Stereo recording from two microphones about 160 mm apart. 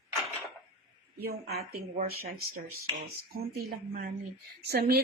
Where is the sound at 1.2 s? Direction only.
75° right (ahead or behind).